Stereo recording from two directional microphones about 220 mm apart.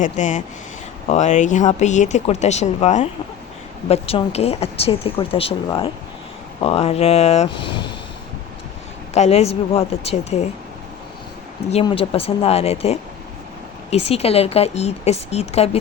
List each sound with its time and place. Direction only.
0.0 s speech: 35° left (ahead or behind)
9.1 s speech: 30° left (ahead or behind)
11.7 s speech: 25° left (ahead or behind)